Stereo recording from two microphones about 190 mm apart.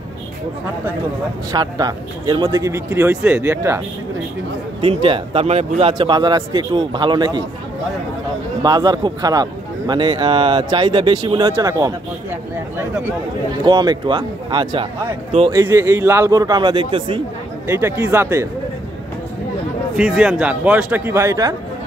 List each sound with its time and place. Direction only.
1.5 s speech: 20° right (ahead or behind)
4.8 s a man's voice: 30° right (ahead or behind)
8.6 s a man's voice: 20° right (ahead or behind)
15.5 s a man's voice: 15° right (ahead or behind)
17.6 s speech: 15° right (ahead or behind)
20.0 s speech: 5° right (ahead or behind)